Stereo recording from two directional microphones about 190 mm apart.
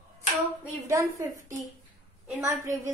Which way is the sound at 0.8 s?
15° right (ahead or behind).